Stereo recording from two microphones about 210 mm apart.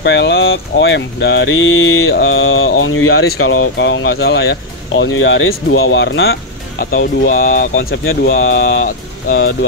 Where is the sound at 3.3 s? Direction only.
80° left; by 7.7 s 40° left (ahead or behind).